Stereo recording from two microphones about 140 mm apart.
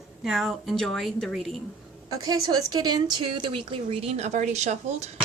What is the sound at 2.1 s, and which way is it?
A woman's voice, 25° right (ahead or behind).